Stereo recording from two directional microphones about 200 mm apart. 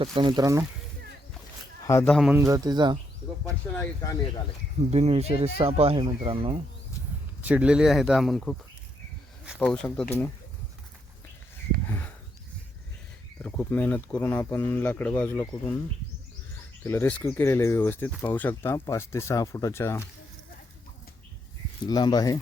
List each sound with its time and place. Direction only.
0.0 s speech: 20° right (ahead or behind)
2.0 s speech: centre (ahead or behind)
2.4 s speech: 20° right (ahead or behind)
3.8 s speech: 15° left (ahead or behind)
4.8 s speech: 30° right (ahead or behind)
7.4 s speech: 5° right (ahead or behind)
9.6 s speech: 5° left (ahead or behind)
11.9 s a sound: 10° left (ahead or behind)
13.4 s speech: 10° left (ahead or behind)
16.8 s speech: 10° left (ahead or behind)
21.8 s speech: 20° left (ahead or behind)